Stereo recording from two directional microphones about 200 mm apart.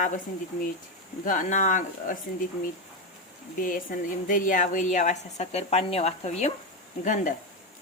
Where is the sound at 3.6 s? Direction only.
40° left (ahead or behind).